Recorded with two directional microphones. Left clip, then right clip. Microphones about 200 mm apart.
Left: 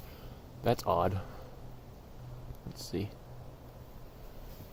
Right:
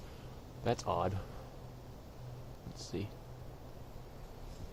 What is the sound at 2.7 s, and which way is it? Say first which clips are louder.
Speech: left 4 dB; 40° left (ahead or behind).